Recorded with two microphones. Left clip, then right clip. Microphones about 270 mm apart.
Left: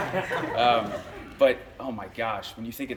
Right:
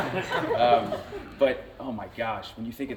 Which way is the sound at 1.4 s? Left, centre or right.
Centre.